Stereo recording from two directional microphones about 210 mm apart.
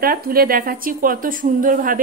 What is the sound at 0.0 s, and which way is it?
A woman's voice, 45° right (ahead or behind).